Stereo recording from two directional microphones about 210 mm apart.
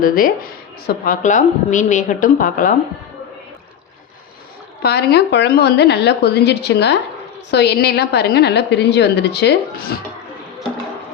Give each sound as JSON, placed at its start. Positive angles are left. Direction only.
{"t": 0.0, "sound": "a woman's voice", "side_deg": 40}
{"t": 4.8, "sound": "a woman's voice", "side_deg": 50}